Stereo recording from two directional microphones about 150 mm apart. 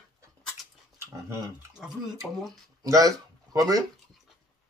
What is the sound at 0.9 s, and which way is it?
Speech, 20° right (ahead or behind).